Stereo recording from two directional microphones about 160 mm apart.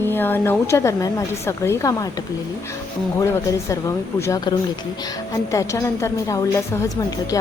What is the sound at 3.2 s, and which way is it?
A woman's voice, 20° left (ahead or behind).